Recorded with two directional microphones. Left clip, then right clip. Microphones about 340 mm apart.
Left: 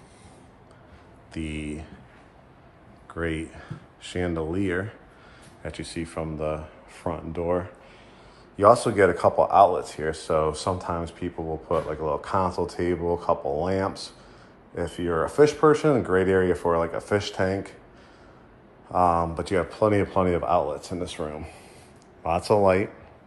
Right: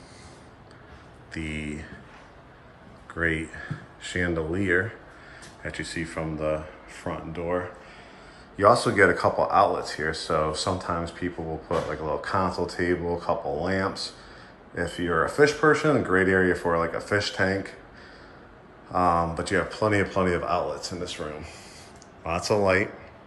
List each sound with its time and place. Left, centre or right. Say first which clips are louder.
1.3 s speech: even; centre
3.2 s speech: right 3 dB; centre
18.9 s speech: left 1 dB; centre